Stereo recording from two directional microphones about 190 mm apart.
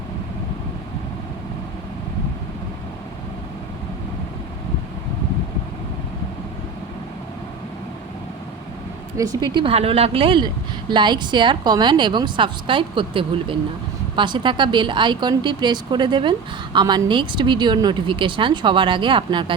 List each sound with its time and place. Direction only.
9.1 s a woman's voice: 20° right (ahead or behind)